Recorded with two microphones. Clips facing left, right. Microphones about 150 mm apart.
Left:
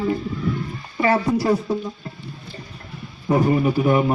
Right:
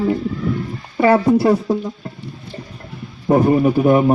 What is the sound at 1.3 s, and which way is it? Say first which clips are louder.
Speech: right 5 dB; 50° right (ahead or behind).